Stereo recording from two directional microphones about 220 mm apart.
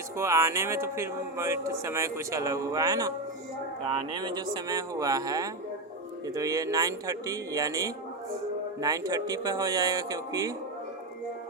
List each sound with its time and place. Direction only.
0.2 s a man's voice: 15° right (ahead or behind)